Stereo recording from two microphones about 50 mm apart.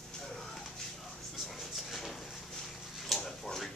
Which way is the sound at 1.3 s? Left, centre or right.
Centre.